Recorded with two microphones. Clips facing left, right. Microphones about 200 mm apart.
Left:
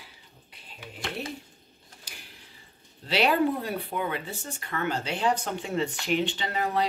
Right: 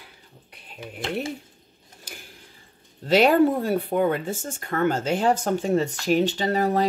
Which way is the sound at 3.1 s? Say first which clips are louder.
Right 7 dB; 45° right (ahead or behind).